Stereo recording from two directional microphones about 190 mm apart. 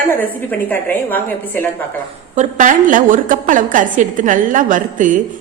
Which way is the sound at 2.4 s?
45° right (ahead or behind).